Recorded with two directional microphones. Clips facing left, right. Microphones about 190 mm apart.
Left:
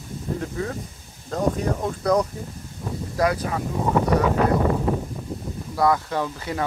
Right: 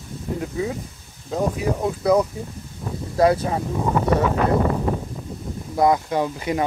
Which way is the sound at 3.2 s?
30° right (ahead or behind).